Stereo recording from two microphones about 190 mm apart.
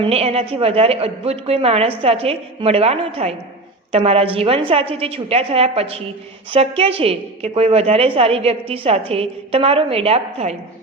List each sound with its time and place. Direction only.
0.0 s a woman's voice: 30° right (ahead or behind)